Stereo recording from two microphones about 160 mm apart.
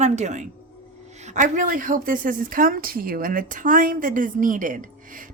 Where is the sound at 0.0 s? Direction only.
45° right (ahead or behind).